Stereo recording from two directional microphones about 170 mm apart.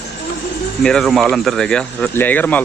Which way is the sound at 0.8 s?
5° left (ahead or behind).